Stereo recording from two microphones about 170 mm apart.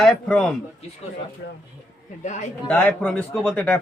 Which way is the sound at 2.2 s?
45° left (ahead or behind).